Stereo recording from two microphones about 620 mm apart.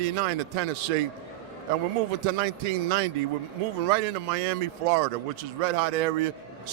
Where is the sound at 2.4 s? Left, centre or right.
Right.